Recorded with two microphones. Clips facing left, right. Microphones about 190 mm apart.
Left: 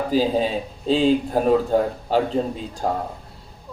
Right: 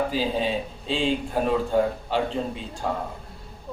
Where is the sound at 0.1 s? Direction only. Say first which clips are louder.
Left 5 dB; 40° left (ahead or behind).